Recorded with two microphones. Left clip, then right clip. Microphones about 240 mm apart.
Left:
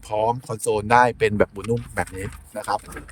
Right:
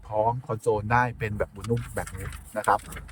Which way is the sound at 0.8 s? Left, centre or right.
Left.